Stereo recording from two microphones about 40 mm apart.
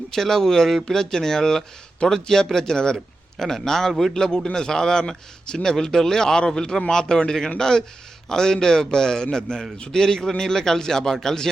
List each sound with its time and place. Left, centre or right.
0.1 s speech: centre